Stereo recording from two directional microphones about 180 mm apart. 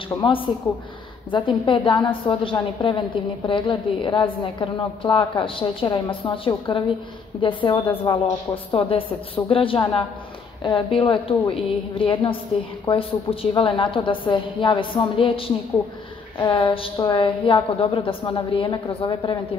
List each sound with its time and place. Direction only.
0.1 s a woman's voice: 25° left (ahead or behind)
8.1 s speech: 15° left (ahead or behind)
8.7 s a woman's voice: 30° left (ahead or behind)